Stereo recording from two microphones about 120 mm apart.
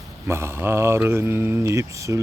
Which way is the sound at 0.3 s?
20° right (ahead or behind).